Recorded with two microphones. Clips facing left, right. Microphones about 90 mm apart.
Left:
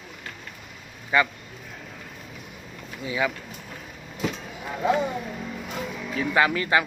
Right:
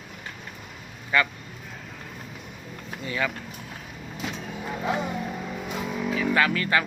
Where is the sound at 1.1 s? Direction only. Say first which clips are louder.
Left 2 dB; 15° left (ahead or behind).